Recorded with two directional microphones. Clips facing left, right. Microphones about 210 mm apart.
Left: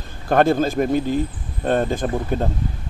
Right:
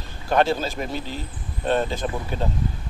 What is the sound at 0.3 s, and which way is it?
Speech, 50° left (ahead or behind).